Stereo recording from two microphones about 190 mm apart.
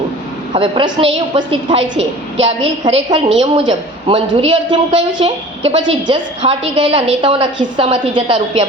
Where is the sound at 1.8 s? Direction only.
75° right (ahead or behind).